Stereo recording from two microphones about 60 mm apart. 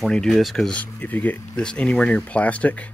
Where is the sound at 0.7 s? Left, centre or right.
Left.